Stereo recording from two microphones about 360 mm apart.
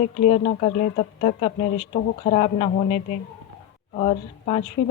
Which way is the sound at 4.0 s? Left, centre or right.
Centre.